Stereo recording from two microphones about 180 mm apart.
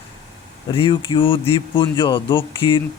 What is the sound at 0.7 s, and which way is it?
Speech, 30° left (ahead or behind).